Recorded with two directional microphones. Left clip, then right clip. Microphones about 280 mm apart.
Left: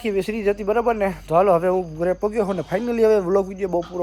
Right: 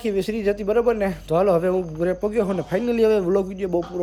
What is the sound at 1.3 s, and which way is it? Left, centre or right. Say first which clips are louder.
Speech: left 2 dB; left.